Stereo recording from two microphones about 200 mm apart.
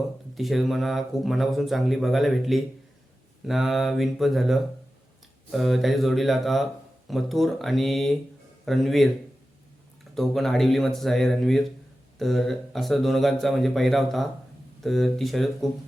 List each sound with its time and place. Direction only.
0.3 s speech: centre (ahead or behind)
10.2 s speech: centre (ahead or behind)